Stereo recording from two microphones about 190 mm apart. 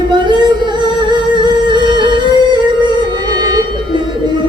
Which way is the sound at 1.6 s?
25° right (ahead or behind).